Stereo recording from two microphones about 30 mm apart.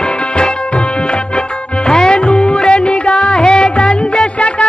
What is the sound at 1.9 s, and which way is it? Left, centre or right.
Music, left.